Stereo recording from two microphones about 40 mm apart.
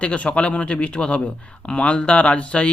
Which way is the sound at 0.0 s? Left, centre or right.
Left.